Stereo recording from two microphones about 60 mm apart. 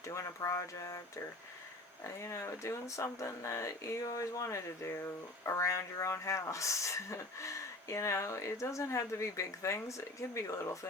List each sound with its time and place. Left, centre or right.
0.1 s speech: left
2.0 s speech: left